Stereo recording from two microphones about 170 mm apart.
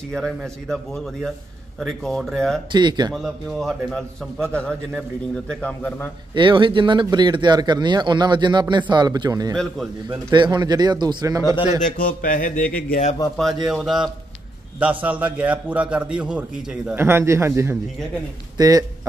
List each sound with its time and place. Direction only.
0.1 s speech: 5° left (ahead or behind)
2.7 s speech: 25° right (ahead or behind)
3.2 s a man's voice: centre (ahead or behind)
6.3 s speech: 30° right (ahead or behind)
12.0 s mantra: 55° left (ahead or behind)
13.4 s a man's voice: centre (ahead or behind); by 18.9 s 20° right (ahead or behind)